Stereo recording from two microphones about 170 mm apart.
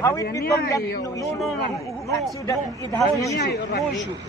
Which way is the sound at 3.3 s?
70° left (ahead or behind).